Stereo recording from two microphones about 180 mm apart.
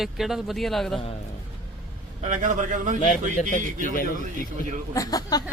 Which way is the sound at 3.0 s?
40° left (ahead or behind).